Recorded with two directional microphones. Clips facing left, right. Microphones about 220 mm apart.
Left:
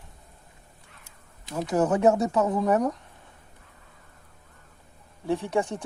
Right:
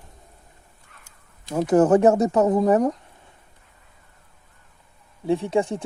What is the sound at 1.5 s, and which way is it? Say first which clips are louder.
Speech: right 8 dB; 50° right (ahead or behind).